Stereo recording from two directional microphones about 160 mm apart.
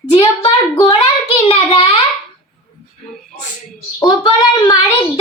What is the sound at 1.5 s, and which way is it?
Child singing, 35° left (ahead or behind).